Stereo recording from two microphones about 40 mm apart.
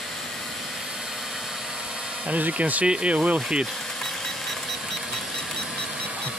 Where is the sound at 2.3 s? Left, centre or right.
Right.